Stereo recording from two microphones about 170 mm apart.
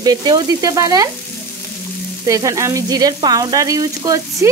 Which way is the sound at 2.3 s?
20° right (ahead or behind).